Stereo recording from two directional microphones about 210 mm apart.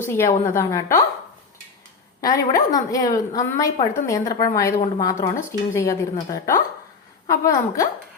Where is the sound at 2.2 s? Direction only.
15° left (ahead or behind).